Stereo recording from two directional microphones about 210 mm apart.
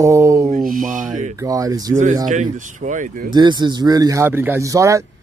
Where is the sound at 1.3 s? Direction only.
15° right (ahead or behind).